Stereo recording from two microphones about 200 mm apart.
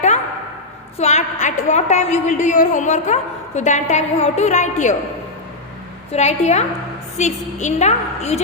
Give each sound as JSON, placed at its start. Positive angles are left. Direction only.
{"t": 0.9, "sound": "a woman's voice", "side_deg": 35}
{"t": 6.1, "sound": "a woman's voice", "side_deg": 35}